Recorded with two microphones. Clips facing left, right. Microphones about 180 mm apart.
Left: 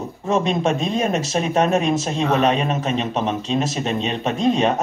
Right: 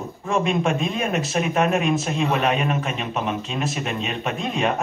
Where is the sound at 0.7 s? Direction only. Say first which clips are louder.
Left 3 dB; 35° left (ahead or behind).